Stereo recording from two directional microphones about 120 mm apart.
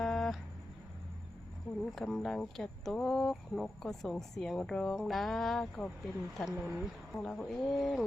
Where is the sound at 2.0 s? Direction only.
Centre (ahead or behind).